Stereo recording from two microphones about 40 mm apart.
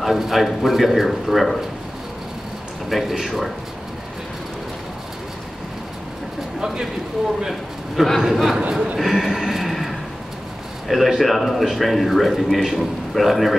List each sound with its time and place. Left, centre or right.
0.0 s speech: centre
2.9 s speech: centre
6.6 s a man's voice: centre
7.4 s a man's voice: centre
8.9 s a sound: centre
10.9 s speech: centre